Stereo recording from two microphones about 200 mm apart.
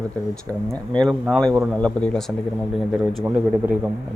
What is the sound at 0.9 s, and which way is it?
Speech, 5° left (ahead or behind).